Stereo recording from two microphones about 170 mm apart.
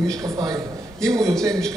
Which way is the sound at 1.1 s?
20° right (ahead or behind).